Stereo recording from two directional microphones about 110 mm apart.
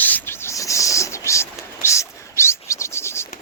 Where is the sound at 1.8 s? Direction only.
25° left (ahead or behind).